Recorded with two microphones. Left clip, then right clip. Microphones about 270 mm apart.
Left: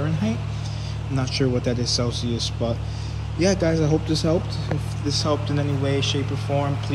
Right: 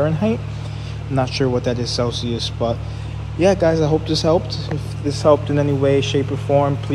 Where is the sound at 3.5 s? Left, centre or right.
Right.